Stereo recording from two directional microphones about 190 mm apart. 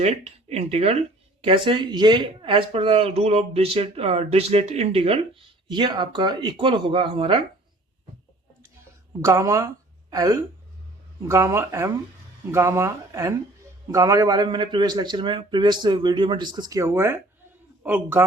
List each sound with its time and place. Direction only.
0.0 s a man's voice: 35° right (ahead or behind)
9.2 s a man's voice: 15° right (ahead or behind)